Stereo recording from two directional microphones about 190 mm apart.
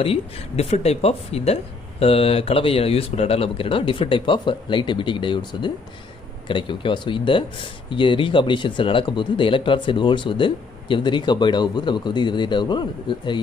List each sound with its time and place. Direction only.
0.0 s speech: 30° left (ahead or behind)